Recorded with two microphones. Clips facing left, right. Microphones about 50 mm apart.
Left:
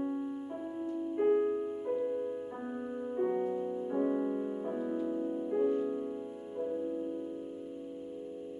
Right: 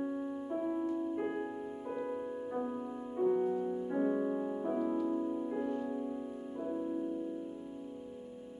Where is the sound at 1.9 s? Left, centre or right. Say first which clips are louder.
Left 3 dB; right.